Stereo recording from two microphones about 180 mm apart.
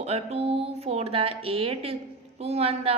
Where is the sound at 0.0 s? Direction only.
35° right (ahead or behind).